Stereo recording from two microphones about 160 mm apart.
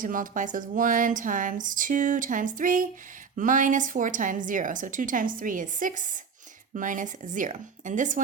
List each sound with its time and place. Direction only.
0.0 s speech: 55° right (ahead or behind)